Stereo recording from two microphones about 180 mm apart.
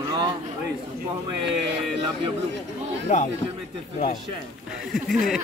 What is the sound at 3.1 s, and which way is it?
Speech, 40° left (ahead or behind).